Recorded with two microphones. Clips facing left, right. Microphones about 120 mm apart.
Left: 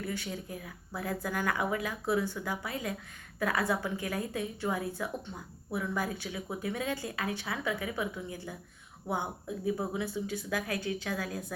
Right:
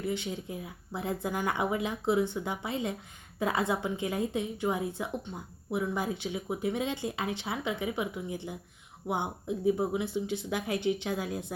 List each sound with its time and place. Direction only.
0.0 s speech: 20° right (ahead or behind)